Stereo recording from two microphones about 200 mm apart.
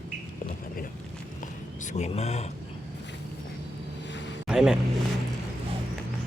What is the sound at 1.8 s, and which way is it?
Speech, 35° left (ahead or behind).